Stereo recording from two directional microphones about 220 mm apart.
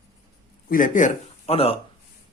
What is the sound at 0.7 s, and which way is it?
A man's voice, 40° left (ahead or behind).